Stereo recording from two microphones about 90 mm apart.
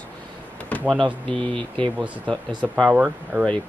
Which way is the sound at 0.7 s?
15° left (ahead or behind).